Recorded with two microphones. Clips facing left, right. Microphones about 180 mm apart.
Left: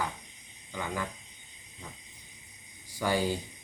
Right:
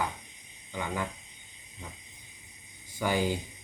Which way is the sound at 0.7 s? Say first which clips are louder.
Right 1 dB; 20° right (ahead or behind).